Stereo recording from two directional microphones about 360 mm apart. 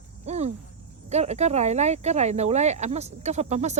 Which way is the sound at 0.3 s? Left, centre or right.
Centre.